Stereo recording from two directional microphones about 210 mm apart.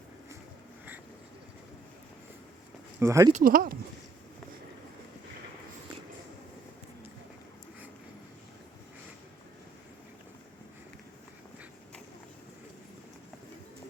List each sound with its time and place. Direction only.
3.0 s speech: 15° right (ahead or behind)
3.3 s speech: 40° right (ahead or behind)